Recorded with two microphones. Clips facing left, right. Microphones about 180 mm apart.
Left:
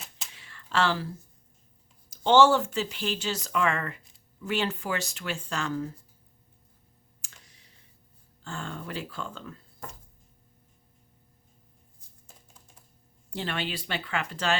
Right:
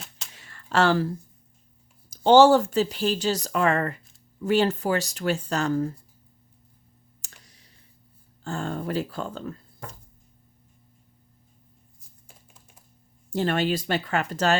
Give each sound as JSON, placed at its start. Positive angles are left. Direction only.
{"t": 0.3, "sound": "a sound", "side_deg": -45}
{"t": 2.0, "sound": "speech", "side_deg": -40}
{"t": 7.2, "sound": "clicking", "side_deg": -40}
{"t": 8.4, "sound": "speech", "side_deg": -40}
{"t": 13.3, "sound": "speech", "side_deg": -45}